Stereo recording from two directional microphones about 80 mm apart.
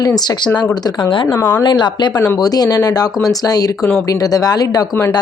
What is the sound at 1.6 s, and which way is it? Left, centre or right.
Speech, left.